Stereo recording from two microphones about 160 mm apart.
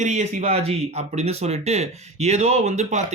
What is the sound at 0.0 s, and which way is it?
Speech, 50° right (ahead or behind).